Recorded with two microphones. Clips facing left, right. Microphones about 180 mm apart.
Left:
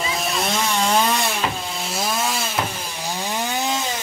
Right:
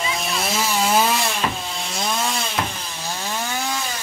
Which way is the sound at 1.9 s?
5° left (ahead or behind).